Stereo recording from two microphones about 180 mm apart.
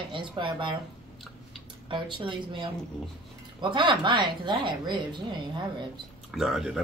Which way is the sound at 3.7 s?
25° right (ahead or behind).